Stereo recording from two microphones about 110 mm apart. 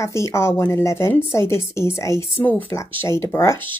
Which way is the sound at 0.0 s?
25° left (ahead or behind).